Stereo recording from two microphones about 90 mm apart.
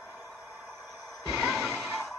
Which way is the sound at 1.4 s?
5° right (ahead or behind).